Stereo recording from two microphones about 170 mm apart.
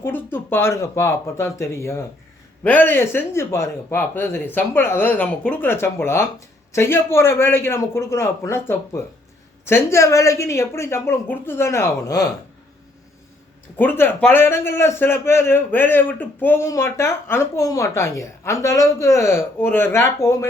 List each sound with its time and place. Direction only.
0.0 s a man's voice: 10° left (ahead or behind)
13.7 s a man's voice: 10° left (ahead or behind)